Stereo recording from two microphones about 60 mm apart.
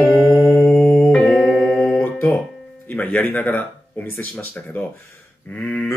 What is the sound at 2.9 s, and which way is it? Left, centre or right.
Speech, left.